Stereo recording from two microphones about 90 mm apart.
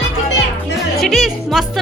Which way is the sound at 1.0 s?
Centre (ahead or behind).